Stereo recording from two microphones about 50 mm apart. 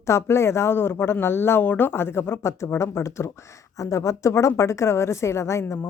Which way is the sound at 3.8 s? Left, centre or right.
Left.